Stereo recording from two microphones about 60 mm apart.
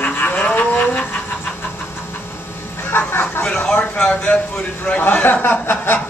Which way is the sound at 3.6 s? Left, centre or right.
Left.